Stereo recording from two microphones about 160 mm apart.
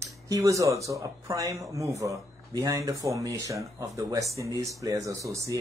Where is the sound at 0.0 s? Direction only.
20° right (ahead or behind).